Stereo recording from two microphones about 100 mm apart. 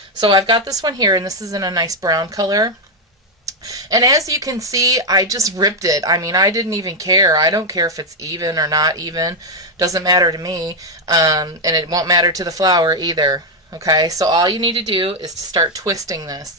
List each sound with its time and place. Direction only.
0.2 s speech: 55° right (ahead or behind)
15.2 s speech: 40° right (ahead or behind)